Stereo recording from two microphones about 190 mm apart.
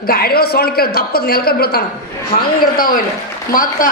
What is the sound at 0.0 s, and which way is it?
A man's voice, 55° left (ahead or behind).